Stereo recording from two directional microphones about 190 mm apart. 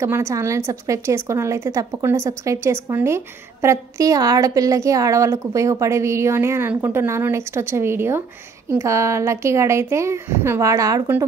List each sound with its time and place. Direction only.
0.0 s a woman's voice: 15° right (ahead or behind)